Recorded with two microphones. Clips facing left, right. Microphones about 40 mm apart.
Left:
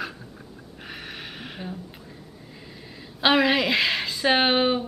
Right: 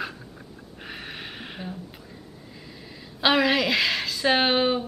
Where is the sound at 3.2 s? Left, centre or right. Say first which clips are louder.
Left 1 dB; centre.